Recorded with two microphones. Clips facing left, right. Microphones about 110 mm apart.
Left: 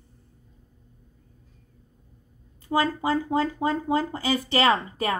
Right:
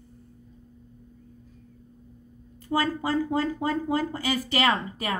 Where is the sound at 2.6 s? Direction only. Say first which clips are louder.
Left 2 dB; 20° left (ahead or behind).